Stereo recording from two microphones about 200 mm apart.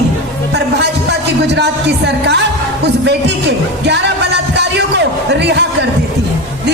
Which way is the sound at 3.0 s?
60° right (ahead or behind).